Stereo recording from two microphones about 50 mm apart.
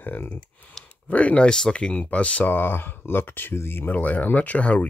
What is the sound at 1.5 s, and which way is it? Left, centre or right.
Speech, centre.